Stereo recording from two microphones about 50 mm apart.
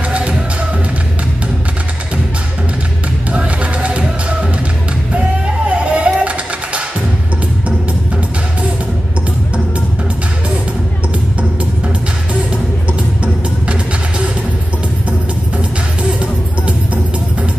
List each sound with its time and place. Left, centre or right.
0.1 s music: right
3.3 s music: right
5.7 s music: right
16.0 s music: right